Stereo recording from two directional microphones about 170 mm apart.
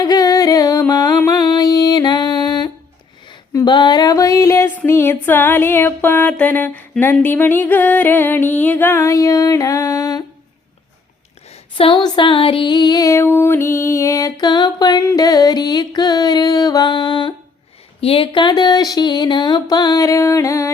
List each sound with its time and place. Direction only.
0.0 s music: 20° left (ahead or behind)
3.2 s female singing: 25° left (ahead or behind)
11.4 s female singing: 35° left (ahead or behind); by 20.7 s 20° left (ahead or behind)